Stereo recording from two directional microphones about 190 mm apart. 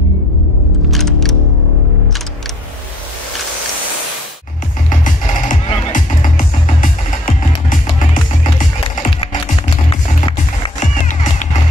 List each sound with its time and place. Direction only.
0.8 s music: centre (ahead or behind)
4.8 s music: 45° left (ahead or behind)
9.6 s music: 25° left (ahead or behind)
10.8 s music: 40° left (ahead or behind)